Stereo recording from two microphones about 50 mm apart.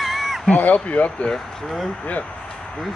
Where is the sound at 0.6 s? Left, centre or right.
Left.